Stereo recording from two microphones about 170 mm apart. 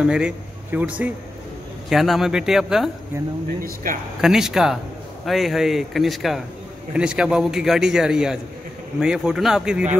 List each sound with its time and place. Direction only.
0.0 s a man's voice: 5° right (ahead or behind)
3.6 s speech: 55° right (ahead or behind)
4.2 s a man's voice: centre (ahead or behind)